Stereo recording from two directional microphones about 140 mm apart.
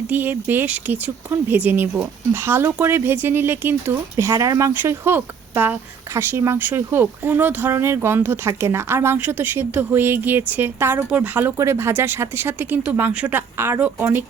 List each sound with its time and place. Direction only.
0.1 s speech: 15° right (ahead or behind)